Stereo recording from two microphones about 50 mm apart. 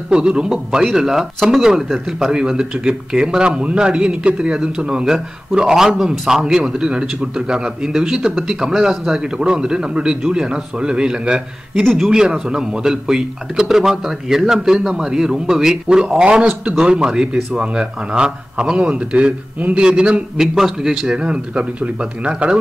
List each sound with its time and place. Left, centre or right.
0.1 s speech: centre
11.8 s speech: centre
12.1 s a man's voice: centre
20.5 s speech: centre
21.2 s a man's voice: centre